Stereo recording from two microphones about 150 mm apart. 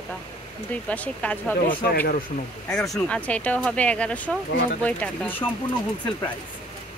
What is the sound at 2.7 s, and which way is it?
Speech, 5° left (ahead or behind).